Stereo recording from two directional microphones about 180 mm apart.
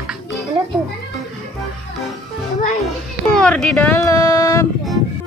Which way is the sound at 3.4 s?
5° left (ahead or behind).